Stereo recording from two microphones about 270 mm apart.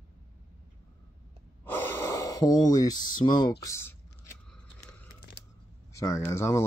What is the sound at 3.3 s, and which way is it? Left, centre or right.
Speech, centre.